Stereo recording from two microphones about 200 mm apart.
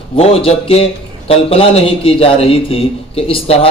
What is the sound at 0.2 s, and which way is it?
A man's voice, 30° left (ahead or behind).